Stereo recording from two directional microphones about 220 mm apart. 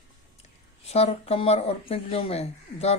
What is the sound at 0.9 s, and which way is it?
Speech, 30° left (ahead or behind).